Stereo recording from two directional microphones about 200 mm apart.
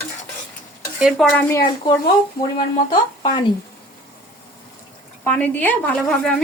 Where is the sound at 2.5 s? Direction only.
25° left (ahead or behind).